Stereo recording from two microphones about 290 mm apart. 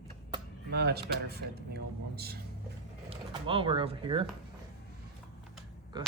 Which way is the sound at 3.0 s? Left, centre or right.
Centre.